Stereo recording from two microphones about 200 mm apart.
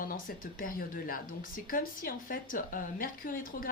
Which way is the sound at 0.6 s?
45° left (ahead or behind).